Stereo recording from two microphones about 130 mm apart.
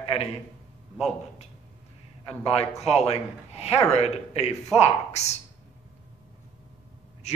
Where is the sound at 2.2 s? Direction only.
50° left (ahead or behind).